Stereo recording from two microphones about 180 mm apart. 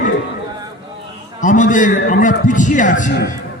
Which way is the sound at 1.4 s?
45° left (ahead or behind).